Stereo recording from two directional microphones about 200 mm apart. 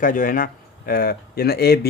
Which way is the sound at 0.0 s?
45° left (ahead or behind).